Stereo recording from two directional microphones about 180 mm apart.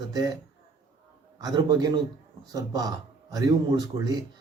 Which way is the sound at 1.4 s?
25° right (ahead or behind).